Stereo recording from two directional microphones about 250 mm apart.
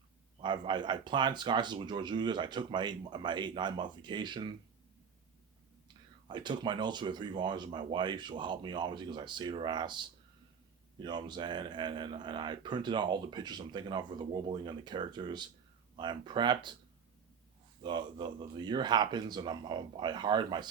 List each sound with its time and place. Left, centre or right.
0.4 s speech: centre
6.2 s speech: centre
17.8 s speech: centre